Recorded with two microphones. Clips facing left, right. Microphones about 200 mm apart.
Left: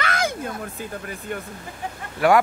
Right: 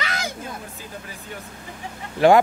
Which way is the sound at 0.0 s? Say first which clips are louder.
Left 5 dB; 55° left (ahead or behind).